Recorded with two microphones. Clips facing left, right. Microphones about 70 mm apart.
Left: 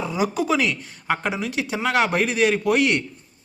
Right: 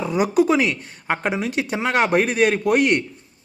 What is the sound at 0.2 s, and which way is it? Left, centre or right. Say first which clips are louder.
Speech: right 6 dB; right.